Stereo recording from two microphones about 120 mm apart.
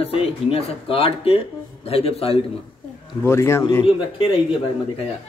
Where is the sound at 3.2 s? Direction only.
20° left (ahead or behind).